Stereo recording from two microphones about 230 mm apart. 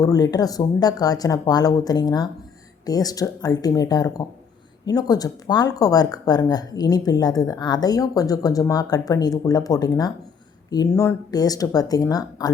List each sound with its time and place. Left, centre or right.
0.0 s speech: centre